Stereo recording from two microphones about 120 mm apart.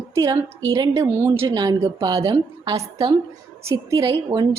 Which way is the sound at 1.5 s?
30° right (ahead or behind).